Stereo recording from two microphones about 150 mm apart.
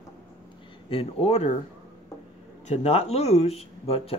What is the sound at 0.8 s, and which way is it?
Speech, 40° left (ahead or behind).